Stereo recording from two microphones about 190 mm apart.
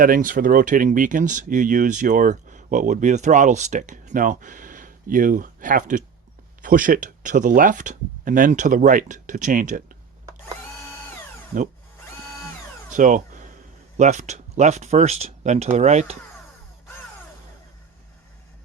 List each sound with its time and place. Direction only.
0.0 s speech: 45° right (ahead or behind)
12.9 s a sound: 45° right (ahead or behind)
13.9 s speech: 40° right (ahead or behind)